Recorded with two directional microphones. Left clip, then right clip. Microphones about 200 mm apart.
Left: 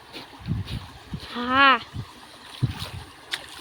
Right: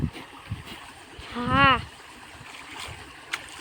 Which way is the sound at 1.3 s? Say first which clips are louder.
Left 2 dB; centre (ahead or behind).